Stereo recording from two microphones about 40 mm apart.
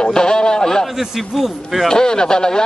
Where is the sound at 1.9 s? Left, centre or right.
Centre.